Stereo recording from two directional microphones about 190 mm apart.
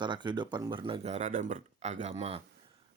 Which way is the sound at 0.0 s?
25° right (ahead or behind).